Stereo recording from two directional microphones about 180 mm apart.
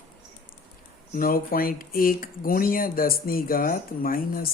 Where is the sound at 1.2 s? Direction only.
50° left (ahead or behind).